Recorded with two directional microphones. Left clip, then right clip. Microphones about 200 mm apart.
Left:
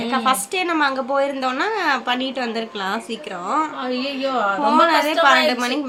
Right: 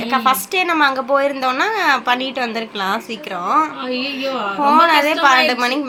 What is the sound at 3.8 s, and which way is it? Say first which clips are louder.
Speech: right 2 dB; 15° left (ahead or behind).